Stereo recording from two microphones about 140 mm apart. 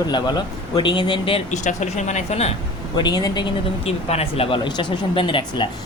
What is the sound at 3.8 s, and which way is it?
Speech, 45° left (ahead or behind).